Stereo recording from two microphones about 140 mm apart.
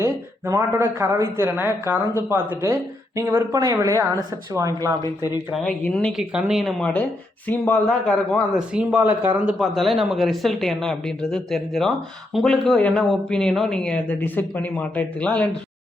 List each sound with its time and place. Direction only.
0.0 s speech: 20° right (ahead or behind)
5.6 s speech: 10° left (ahead or behind)
8.7 s speech: 5° right (ahead or behind)
9.6 s speech: centre (ahead or behind)